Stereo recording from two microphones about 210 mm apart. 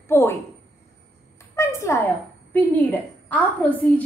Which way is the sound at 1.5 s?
15° left (ahead or behind).